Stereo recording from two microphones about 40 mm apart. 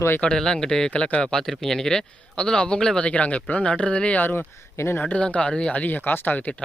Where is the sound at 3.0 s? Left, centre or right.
Left.